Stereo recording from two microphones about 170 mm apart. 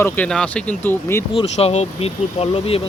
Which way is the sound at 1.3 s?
35° left (ahead or behind).